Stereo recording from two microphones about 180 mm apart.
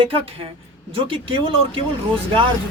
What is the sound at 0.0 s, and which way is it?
Speech, 30° right (ahead or behind).